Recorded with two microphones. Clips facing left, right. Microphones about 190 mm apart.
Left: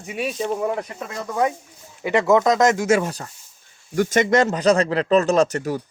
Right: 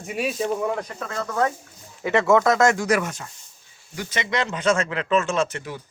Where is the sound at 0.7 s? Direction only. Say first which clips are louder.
Left 1 dB; 15° left (ahead or behind); by 3.3 s 35° left (ahead or behind).